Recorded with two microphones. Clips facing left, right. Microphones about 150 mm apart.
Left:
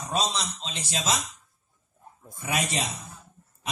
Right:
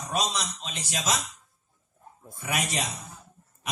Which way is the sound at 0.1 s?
30° left (ahead or behind).